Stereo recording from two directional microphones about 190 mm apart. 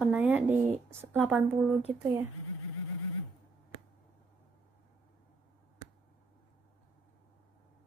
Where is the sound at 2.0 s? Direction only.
15° right (ahead or behind).